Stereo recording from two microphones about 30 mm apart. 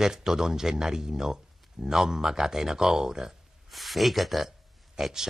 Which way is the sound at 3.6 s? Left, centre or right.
Centre.